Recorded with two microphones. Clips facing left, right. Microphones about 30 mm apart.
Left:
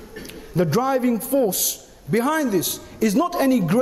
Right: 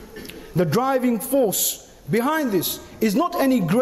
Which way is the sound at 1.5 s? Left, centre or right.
Right.